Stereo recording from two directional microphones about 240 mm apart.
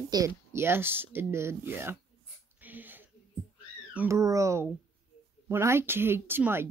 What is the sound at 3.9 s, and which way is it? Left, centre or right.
A woman's voice, centre.